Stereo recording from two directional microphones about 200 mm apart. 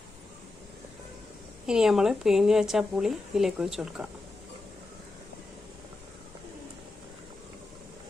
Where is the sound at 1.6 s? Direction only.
5° right (ahead or behind).